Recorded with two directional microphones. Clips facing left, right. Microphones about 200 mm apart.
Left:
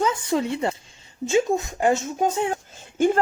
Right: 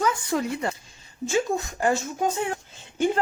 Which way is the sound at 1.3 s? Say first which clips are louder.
Left 4 dB; 20° left (ahead or behind).